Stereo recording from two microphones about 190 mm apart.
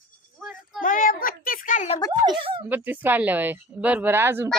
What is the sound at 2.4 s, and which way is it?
Speech, 30° right (ahead or behind).